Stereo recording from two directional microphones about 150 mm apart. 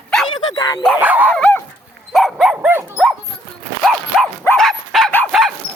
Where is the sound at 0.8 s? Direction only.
5° right (ahead or behind).